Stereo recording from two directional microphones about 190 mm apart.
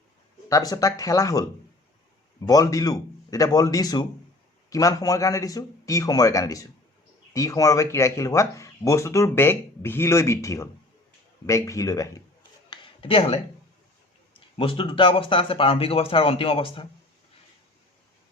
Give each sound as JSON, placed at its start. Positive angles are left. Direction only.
{"t": 0.4, "sound": "speech", "side_deg": 20}
{"t": 2.5, "sound": "speech", "side_deg": 20}
{"t": 12.7, "sound": "a sound", "side_deg": 25}
{"t": 14.3, "sound": "speech", "side_deg": 25}